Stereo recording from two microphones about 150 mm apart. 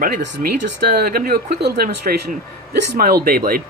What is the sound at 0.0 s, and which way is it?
Speech, 80° right.